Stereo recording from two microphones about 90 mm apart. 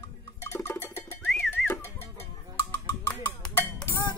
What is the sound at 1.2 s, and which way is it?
Music, 10° left (ahead or behind).